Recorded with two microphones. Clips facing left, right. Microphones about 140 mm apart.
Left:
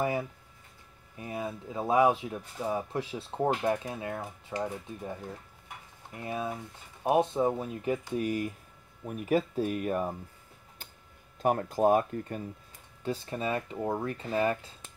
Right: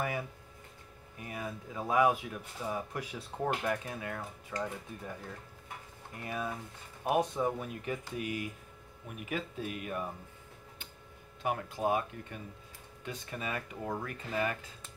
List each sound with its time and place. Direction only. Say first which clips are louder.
1.2 s speech: left 5 dB; 25° left (ahead or behind); by 10.1 s 40° left (ahead or behind)
11.4 s speech: left 7 dB; 45° left (ahead or behind)
13.0 s speech: left 7 dB; 30° left (ahead or behind)